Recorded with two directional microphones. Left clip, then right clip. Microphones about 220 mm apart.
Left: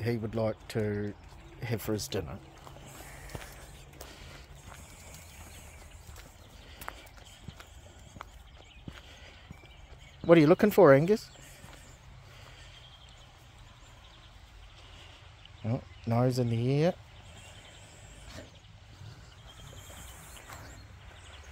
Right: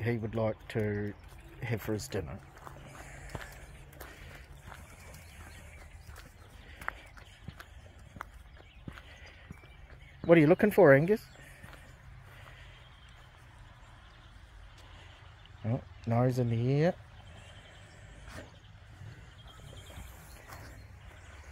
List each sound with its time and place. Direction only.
0.0 s speech: 15° left (ahead or behind)
1.6 s speech: 20° left (ahead or behind)
3.3 s a sound: 15° right (ahead or behind)
10.2 s speech: 20° left (ahead or behind)
15.6 s speech: 15° left (ahead or behind)